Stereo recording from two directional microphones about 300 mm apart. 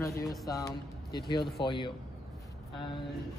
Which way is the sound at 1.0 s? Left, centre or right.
Left.